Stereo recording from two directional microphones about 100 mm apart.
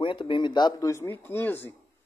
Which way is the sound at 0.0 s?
60° left (ahead or behind).